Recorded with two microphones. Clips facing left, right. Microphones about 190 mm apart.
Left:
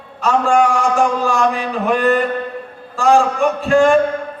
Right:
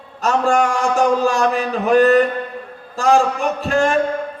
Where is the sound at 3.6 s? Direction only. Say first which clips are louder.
Left 6 dB; 40° right (ahead or behind).